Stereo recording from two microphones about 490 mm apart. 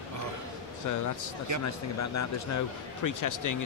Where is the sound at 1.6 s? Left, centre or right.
Left.